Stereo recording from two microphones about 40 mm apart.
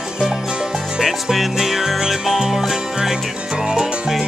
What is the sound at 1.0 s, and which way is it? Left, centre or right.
Music, centre.